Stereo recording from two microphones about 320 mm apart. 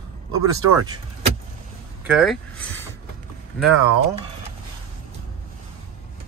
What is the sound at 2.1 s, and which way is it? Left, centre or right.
Speech, centre.